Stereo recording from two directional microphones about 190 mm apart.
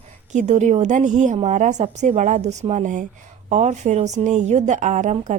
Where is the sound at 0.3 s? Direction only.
40° right (ahead or behind).